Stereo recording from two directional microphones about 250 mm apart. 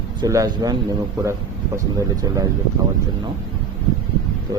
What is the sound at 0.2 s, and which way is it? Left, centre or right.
Speech, centre.